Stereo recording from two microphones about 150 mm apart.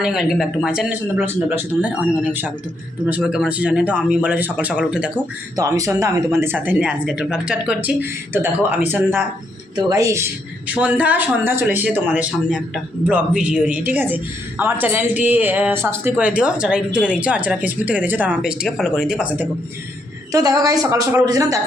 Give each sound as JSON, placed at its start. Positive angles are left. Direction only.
{"t": 0.0, "sound": "speech", "side_deg": -5}
{"t": 5.5, "sound": "a woman's voice", "side_deg": -20}
{"t": 10.8, "sound": "speech", "side_deg": -10}
{"t": 20.3, "sound": "a woman's voice", "side_deg": -25}